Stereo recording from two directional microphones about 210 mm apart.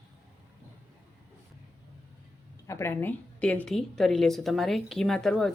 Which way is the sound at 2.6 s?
15° left (ahead or behind).